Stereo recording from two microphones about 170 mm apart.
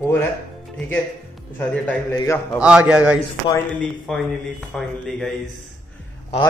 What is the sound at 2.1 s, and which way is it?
Speech, 15° left (ahead or behind).